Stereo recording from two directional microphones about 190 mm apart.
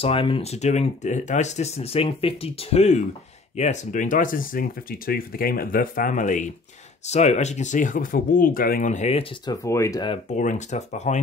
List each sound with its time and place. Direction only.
0.0 s speech: 30° left (ahead or behind)
9.5 s speech: 15° left (ahead or behind)
10.3 s speech: 40° left (ahead or behind)